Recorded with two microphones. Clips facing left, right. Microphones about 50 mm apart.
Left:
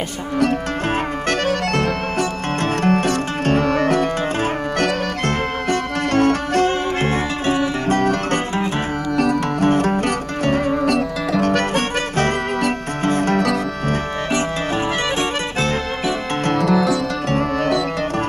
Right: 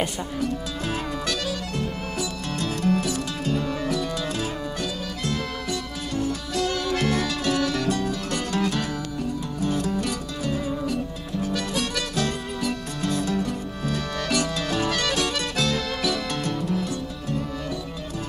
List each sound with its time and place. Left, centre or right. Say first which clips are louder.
1.8 s music: left 9 dB; left
6.5 s music: left 7 dB; left
7.9 s music: left 9 dB; left
8.5 s music: left 3 dB; left
9.1 s music: left 11 dB; left
9.7 s music: left 7 dB; left
11.7 s music: left 7 dB; left
14.3 s music: left 4 dB; left
16.4 s music: left 15 dB; left